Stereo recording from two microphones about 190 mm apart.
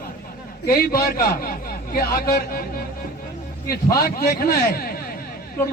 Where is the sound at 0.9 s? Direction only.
55° left (ahead or behind).